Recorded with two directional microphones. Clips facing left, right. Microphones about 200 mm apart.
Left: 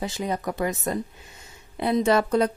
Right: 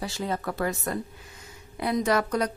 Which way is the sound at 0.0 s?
20° left (ahead or behind).